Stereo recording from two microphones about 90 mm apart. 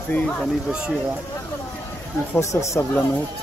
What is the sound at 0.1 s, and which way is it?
Speech, 15° left (ahead or behind).